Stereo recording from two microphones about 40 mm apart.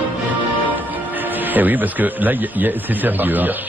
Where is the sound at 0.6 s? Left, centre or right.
Right.